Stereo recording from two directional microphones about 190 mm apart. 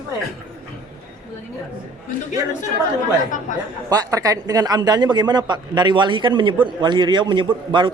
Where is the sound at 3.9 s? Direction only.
20° right (ahead or behind).